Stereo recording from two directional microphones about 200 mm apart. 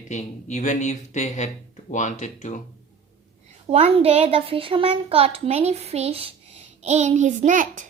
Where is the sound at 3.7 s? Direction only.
30° right (ahead or behind).